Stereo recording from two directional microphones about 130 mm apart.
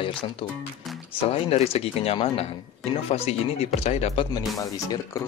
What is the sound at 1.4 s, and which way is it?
Speech, 50° left (ahead or behind).